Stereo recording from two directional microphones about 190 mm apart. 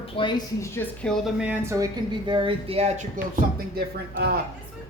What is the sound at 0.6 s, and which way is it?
A woman's voice, 10° left (ahead or behind).